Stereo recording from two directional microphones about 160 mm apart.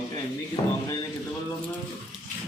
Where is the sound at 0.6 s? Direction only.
30° left (ahead or behind).